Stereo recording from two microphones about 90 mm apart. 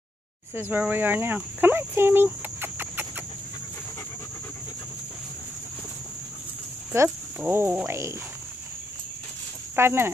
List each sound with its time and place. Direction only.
0.7 s speech: 20° right (ahead or behind)
6.9 s speech: 25° right (ahead or behind)
9.8 s speech: 25° right (ahead or behind)